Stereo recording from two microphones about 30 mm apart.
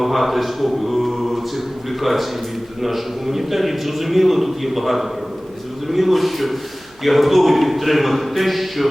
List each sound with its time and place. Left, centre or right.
0.0 s a man's voice: centre